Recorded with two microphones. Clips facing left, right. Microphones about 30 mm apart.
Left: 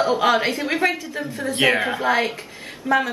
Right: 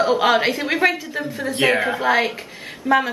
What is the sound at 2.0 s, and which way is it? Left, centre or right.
Speech, centre.